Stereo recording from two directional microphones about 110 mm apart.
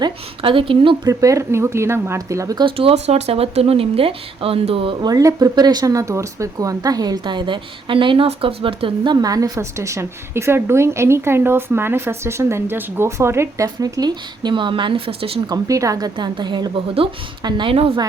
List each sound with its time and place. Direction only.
0.0 s speech: 55° right (ahead or behind)
1.0 s a woman's voice: 30° right (ahead or behind)
2.6 s speech: 55° right (ahead or behind)
4.9 s speech: 35° right (ahead or behind); by 9.1 s 55° right (ahead or behind)
9.1 s a woman's voice: 35° right (ahead or behind); by 15.4 s 55° right (ahead or behind)
15.4 s speech: 30° right (ahead or behind); by 17.9 s 55° right (ahead or behind)